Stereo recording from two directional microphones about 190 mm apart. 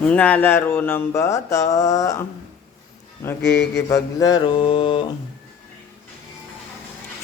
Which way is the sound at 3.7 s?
20° left (ahead or behind).